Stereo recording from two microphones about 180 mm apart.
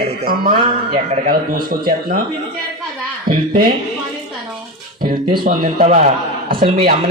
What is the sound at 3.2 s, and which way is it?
Speech, 50° right (ahead or behind).